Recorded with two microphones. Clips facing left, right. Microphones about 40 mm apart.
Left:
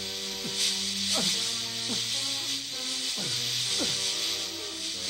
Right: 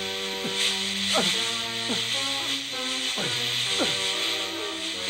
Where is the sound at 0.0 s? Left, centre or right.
Right.